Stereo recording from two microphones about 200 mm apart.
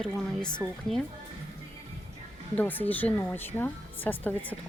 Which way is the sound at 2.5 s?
10° left (ahead or behind).